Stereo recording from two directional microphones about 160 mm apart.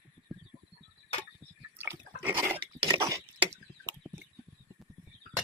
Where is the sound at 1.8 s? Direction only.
15° right (ahead or behind).